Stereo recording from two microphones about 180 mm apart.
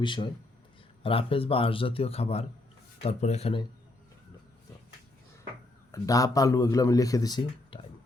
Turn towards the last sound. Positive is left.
turn(degrees=25)  # may be behind; listen again after turning